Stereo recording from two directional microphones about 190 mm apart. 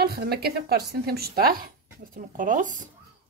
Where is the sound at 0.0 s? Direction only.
55° right (ahead or behind).